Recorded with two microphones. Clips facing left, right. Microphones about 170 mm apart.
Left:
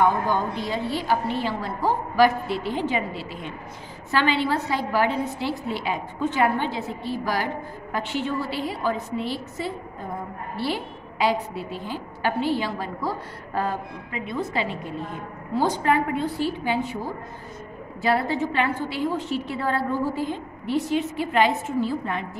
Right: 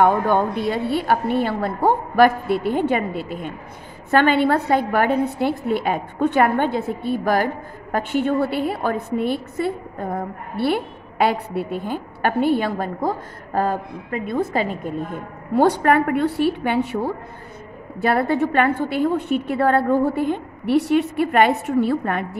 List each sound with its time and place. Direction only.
0.0 s a woman's voice: 60° right (ahead or behind)
15.5 s a woman's voice: 60° right (ahead or behind)
18.0 s a woman's voice: 55° right (ahead or behind)